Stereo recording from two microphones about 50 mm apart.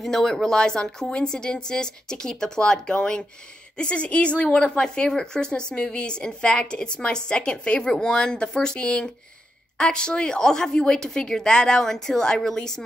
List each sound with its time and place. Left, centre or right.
0.0 s a woman's voice: centre